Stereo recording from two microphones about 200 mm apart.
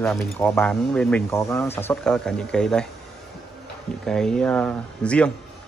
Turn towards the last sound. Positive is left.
turn(degrees=5)  # may be behind; listen again after turning